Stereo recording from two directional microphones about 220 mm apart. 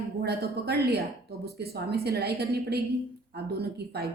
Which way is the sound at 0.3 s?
45° right (ahead or behind).